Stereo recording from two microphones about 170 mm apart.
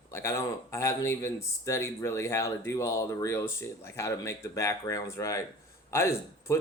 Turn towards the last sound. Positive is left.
turn(degrees=15)  # may be behind; listen again after turning